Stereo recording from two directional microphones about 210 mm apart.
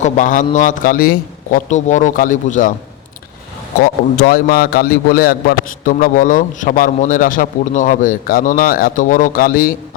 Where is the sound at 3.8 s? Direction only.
45° left (ahead or behind).